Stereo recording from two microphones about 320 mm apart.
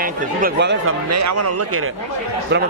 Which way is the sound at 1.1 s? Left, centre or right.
Right.